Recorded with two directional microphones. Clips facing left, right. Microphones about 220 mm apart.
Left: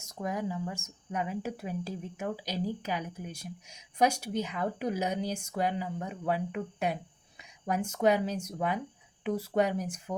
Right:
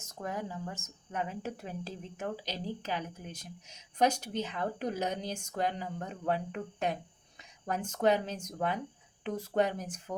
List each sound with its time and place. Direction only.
0.0 s speech: 15° left (ahead or behind)